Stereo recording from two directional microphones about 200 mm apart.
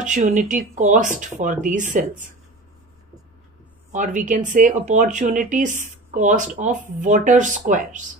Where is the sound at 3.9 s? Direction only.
40° right (ahead or behind).